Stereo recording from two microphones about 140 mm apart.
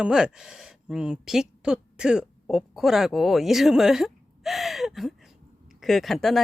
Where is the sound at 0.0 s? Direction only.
5° right (ahead or behind).